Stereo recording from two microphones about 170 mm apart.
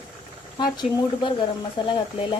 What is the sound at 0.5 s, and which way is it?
Speech, 25° left (ahead or behind).